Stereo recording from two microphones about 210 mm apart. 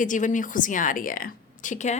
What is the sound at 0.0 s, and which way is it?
Speech, 35° left (ahead or behind).